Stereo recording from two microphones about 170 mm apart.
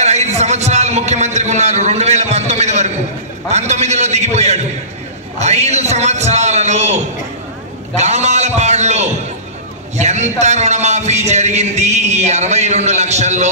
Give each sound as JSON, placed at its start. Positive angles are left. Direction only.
{"t": 0.0, "sound": "a man's voice", "side_deg": -40}